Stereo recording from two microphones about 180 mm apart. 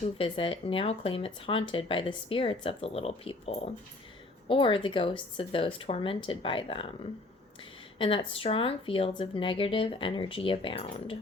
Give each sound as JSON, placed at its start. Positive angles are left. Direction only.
{"t": 0.0, "sound": "speech", "side_deg": 30}